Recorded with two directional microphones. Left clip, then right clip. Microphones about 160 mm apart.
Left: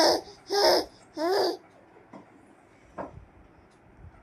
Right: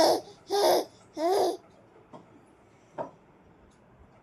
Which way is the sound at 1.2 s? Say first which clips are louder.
Even; 25° right (ahead or behind).